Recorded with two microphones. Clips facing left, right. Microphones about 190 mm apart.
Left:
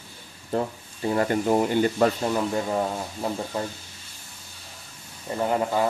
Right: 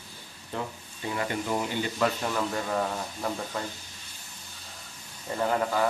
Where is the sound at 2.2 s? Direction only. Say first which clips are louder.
Left 5 dB; 25° left (ahead or behind).